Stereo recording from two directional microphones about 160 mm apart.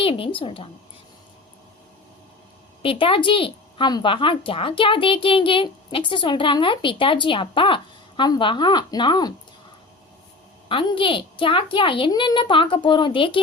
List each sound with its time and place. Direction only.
0.0 s a woman's voice: 35° left (ahead or behind)
2.8 s a woman's voice: 35° left (ahead or behind)
10.7 s a woman's voice: 30° left (ahead or behind)